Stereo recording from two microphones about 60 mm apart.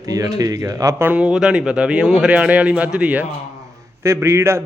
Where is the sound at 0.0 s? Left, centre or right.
Right.